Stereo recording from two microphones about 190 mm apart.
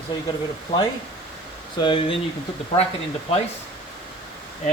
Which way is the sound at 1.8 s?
25° left (ahead or behind).